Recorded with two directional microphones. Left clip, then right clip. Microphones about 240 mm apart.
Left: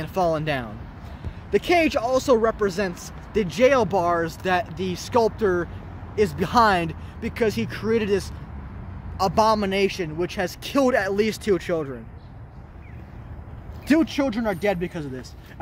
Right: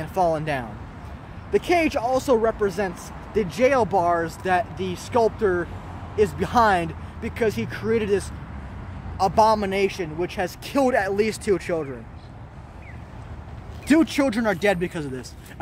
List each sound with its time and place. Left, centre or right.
0.0 s speech: left
13.8 s speech: centre